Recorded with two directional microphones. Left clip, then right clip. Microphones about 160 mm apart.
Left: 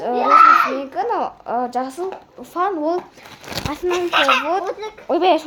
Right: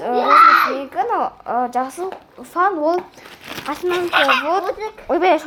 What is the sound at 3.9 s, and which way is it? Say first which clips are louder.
Speech: even; 30° left (ahead or behind).